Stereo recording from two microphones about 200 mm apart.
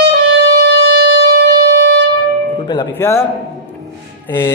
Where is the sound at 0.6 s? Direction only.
60° right (ahead or behind).